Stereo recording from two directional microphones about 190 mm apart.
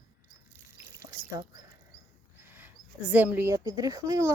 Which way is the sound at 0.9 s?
15° right (ahead or behind).